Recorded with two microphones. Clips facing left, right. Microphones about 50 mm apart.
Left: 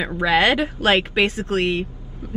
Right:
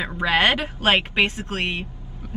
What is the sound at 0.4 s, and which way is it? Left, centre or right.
Speech, right.